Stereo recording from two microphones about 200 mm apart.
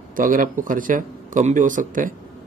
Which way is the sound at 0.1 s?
45° right (ahead or behind).